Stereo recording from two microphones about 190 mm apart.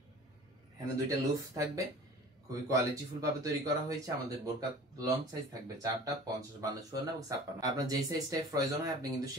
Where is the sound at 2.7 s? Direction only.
20° right (ahead or behind).